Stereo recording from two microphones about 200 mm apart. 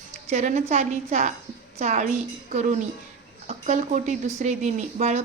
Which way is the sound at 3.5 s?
35° right (ahead or behind).